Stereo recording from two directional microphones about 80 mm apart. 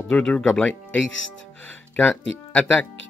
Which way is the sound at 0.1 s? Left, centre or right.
Centre.